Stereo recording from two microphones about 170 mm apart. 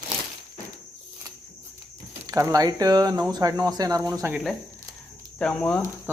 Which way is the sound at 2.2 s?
20° right (ahead or behind).